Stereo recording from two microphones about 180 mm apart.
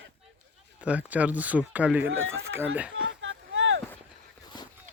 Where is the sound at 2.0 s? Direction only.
90° right.